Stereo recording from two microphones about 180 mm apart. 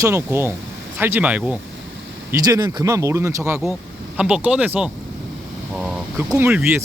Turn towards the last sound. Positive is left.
turn(degrees=-10)  # may be behind; listen again after turning